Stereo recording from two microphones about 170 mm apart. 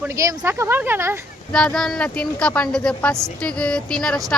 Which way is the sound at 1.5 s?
5° left (ahead or behind).